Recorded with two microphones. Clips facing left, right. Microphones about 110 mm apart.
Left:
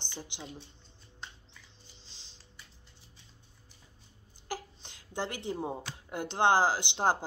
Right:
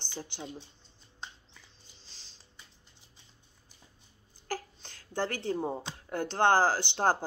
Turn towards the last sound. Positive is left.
turn(degrees=15)  # may be behind; listen again after turning